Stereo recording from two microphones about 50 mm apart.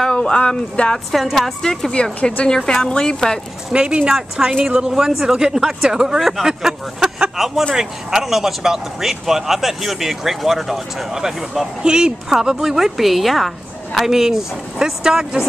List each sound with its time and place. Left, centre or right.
0.0 s speech: centre
0.9 s a woman's voice: centre
3.7 s speech: centre